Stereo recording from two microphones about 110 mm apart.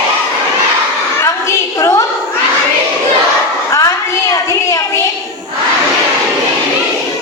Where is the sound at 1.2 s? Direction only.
25° left (ahead or behind).